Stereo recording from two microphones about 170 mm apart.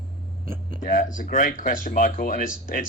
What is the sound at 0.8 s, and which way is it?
A man's voice, 50° left (ahead or behind).